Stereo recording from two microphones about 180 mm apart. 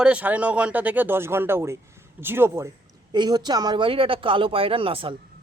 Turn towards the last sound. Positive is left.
turn(degrees=-30)  # may be behind; listen again after turning